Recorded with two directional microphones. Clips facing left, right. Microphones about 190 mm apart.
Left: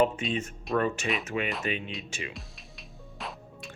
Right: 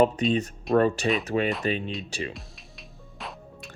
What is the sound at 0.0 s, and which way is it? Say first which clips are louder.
Speech: right 5 dB; 40° right (ahead or behind).